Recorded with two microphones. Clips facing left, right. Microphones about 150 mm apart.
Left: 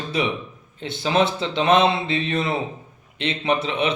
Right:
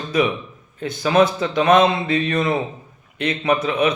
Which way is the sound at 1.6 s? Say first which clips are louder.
Right 2 dB; 45° right (ahead or behind).